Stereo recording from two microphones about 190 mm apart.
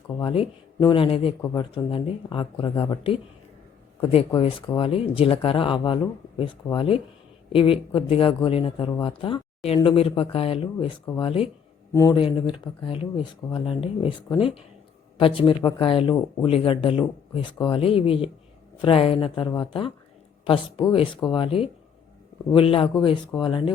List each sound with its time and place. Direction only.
0.2 s speech: 25° left (ahead or behind)